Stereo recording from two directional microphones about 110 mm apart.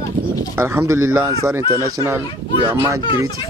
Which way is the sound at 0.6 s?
25° right (ahead or behind).